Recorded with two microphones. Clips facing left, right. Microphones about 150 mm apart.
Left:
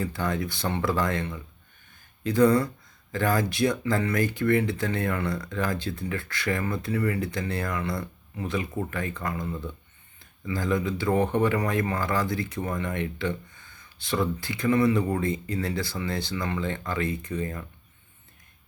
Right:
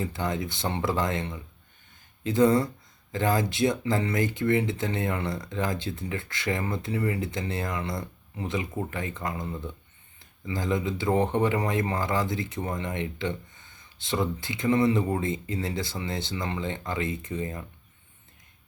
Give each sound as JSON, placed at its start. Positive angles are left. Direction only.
{"t": 0.0, "sound": "speech", "side_deg": -20}